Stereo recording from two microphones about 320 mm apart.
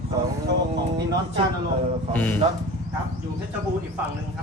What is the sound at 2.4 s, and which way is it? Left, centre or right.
Speech, centre.